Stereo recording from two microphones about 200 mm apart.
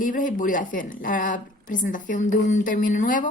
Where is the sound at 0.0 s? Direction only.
40° left (ahead or behind).